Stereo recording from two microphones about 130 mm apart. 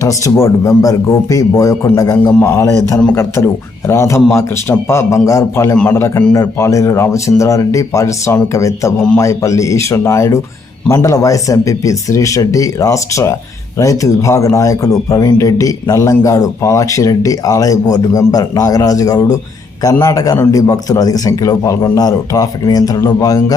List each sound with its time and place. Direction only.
0.0 s speech: 25° left (ahead or behind)
3.8 s speech: 20° left (ahead or behind)